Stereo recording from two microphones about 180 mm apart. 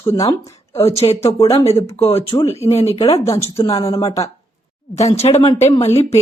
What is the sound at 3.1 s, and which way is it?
Speech, 20° left (ahead or behind).